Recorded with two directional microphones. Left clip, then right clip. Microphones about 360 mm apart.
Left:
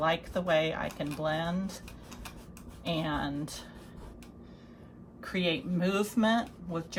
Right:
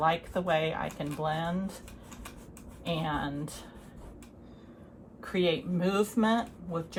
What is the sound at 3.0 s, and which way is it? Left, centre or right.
Speech, centre.